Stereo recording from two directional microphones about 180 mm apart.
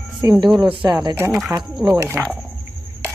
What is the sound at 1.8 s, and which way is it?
Speech, 15° right (ahead or behind).